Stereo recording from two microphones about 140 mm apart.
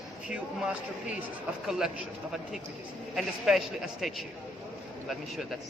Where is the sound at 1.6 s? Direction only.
5° right (ahead or behind).